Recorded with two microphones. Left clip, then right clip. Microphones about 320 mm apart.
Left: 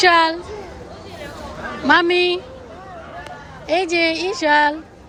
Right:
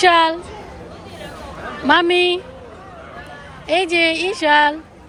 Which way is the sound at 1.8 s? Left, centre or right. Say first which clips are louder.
Right 1 dB; centre.